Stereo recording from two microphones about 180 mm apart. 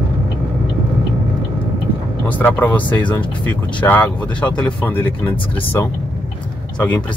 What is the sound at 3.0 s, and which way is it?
Speech, 25° left (ahead or behind).